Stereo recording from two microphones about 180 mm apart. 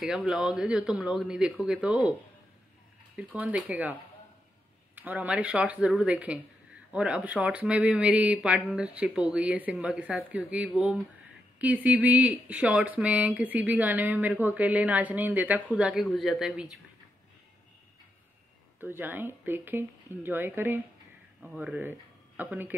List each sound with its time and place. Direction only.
0.0 s speech: 5° right (ahead or behind)
3.2 s speech: 5° right (ahead or behind)
18.8 s speech: 10° right (ahead or behind)